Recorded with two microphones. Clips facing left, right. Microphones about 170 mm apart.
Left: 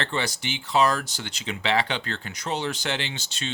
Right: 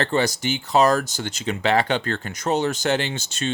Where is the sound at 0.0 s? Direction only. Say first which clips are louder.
Right 7 dB; 40° right (ahead or behind).